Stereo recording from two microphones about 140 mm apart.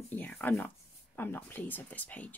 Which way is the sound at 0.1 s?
10° left (ahead or behind).